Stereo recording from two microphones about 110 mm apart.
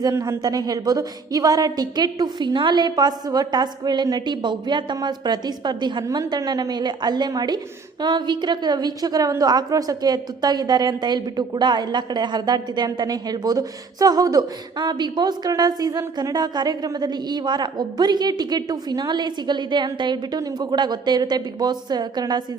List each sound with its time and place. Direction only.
0.0 s a woman's voice: 35° right (ahead or behind)